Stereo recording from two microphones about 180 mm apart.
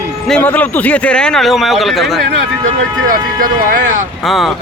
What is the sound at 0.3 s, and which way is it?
Speech, 5° left (ahead or behind).